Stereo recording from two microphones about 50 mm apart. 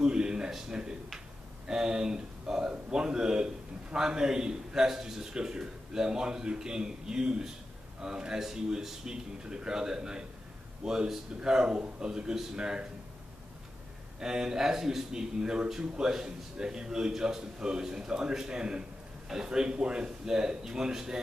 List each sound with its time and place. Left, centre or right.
0.0 s speech: centre
14.2 s speech: centre